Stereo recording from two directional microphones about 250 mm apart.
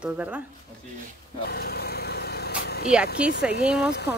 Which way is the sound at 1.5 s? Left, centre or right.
Left.